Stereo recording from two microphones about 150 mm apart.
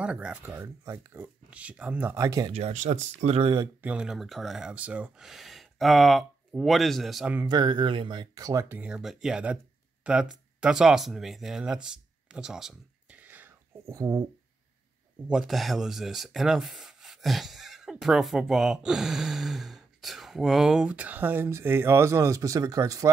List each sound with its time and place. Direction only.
0.0 s speech: 10° right (ahead or behind)
2.5 s speech: 50° right (ahead or behind)
3.3 s speech: 35° right (ahead or behind)
3.8 s speech: 5° right (ahead or behind)
7.4 s speech: 30° right (ahead or behind)
15.2 s speech: centre (ahead or behind); by 23.0 s 25° right (ahead or behind)